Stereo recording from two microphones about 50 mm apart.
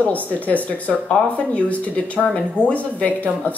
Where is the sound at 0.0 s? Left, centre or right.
Left.